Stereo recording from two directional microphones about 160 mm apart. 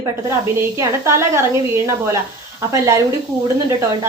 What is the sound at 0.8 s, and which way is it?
Speech, 15° right (ahead or behind).